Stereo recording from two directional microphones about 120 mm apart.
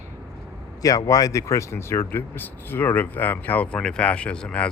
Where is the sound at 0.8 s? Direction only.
30° left (ahead or behind).